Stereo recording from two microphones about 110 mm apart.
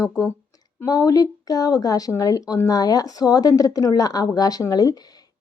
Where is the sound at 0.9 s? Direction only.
35° left (ahead or behind).